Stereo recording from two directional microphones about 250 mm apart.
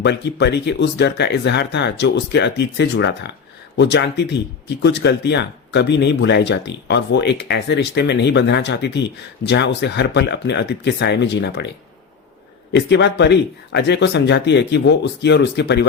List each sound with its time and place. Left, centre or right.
0.0 s speech: left
12.7 s speech: left